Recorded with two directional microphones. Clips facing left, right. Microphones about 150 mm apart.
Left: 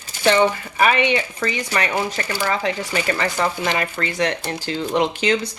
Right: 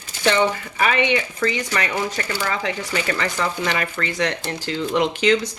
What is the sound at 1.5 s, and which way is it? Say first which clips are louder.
A woman's voice: left 2 dB; 30° left (ahead or behind).